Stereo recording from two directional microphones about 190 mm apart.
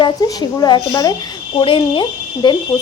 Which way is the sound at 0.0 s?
20° left (ahead or behind).